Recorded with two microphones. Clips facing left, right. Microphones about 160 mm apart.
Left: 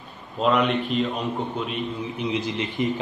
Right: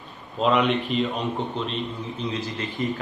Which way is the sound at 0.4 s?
Centre (ahead or behind).